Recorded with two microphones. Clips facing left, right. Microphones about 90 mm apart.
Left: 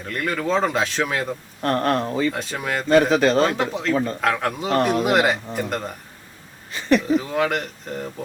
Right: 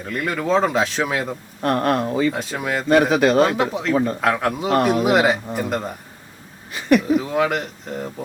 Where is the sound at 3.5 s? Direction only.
5° right (ahead or behind).